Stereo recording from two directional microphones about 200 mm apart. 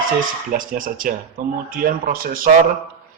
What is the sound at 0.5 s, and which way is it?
Speech, 45° right (ahead or behind).